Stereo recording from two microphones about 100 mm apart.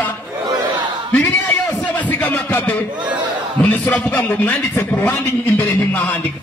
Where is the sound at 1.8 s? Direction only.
15° left (ahead or behind).